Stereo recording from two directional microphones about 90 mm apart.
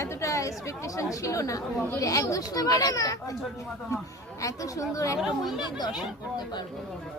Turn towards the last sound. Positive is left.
turn(degrees=-5)  # may be behind; listen again after turning